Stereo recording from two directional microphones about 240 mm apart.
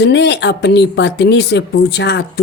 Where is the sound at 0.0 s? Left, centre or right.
Left.